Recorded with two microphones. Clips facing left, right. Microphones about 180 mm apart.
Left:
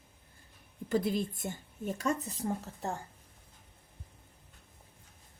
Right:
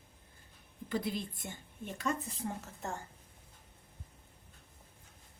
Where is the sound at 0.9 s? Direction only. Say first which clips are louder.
Left 6 dB; 45° left (ahead or behind).